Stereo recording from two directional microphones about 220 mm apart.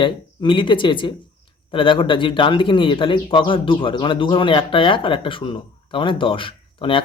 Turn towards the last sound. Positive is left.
turn(degrees=25)  # may be behind; listen again after turning